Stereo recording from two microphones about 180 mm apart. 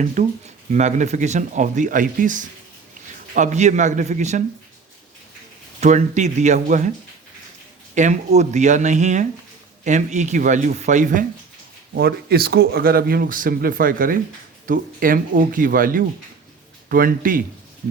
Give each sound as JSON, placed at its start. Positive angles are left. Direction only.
{"t": 0.0, "sound": "speech", "side_deg": -45}
{"t": 5.8, "sound": "speech", "side_deg": -40}
{"t": 7.9, "sound": "speech", "side_deg": -40}
{"t": 11.9, "sound": "speech", "side_deg": -60}